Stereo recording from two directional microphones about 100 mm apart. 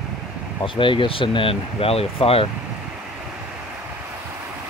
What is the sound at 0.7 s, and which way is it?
Speech, 60° left (ahead or behind).